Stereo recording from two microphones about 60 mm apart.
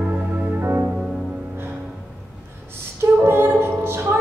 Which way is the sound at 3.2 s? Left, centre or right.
Right.